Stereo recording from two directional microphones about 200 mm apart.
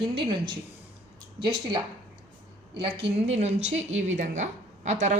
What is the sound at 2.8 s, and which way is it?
A woman's voice, 30° right (ahead or behind).